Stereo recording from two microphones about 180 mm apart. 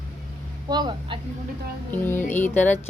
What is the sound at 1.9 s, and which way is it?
Speech, 10° left (ahead or behind).